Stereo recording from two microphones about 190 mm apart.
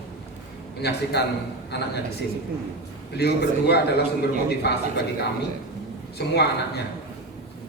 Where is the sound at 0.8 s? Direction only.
60° left (ahead or behind).